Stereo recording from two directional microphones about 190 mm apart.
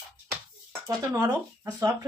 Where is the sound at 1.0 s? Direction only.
20° right (ahead or behind).